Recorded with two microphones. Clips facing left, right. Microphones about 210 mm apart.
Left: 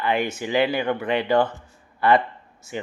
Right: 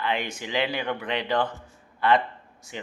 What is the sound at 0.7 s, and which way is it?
Speech, 50° left (ahead or behind).